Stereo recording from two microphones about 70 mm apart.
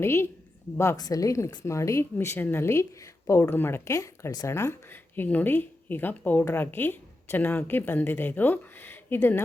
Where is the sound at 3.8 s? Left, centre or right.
Left.